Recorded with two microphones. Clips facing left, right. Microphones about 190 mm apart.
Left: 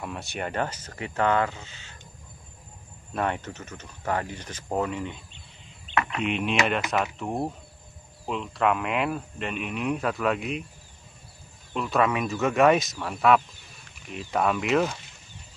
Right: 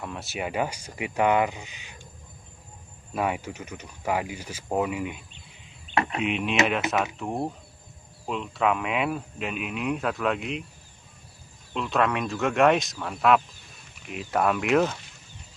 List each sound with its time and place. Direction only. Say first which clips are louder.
0.0 s speech: even; centre (ahead or behind); by 2.0 s 15° right (ahead or behind)
3.1 s speech: right 1 dB; 5° right (ahead or behind)
6.2 s speech: even; centre (ahead or behind)
11.7 s speech: left 1 dB; 5° left (ahead or behind)